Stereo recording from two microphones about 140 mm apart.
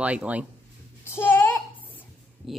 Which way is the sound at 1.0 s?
15° left (ahead or behind).